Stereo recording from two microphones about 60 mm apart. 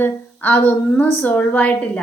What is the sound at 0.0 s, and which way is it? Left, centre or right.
A woman's voice, left.